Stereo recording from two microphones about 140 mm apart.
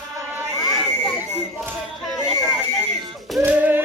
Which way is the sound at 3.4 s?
15° right (ahead or behind).